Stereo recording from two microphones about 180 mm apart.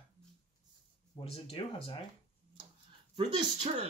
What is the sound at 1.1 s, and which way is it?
Speech, 30° left (ahead or behind).